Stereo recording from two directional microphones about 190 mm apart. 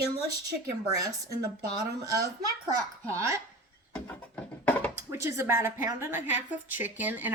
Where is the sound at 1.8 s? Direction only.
20° right (ahead or behind).